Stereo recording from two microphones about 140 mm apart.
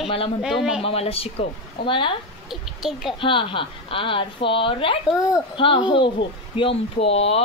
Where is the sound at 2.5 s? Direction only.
Centre (ahead or behind).